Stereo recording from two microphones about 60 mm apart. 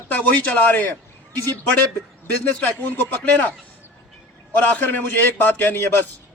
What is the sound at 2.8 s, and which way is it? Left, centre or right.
Speech, left.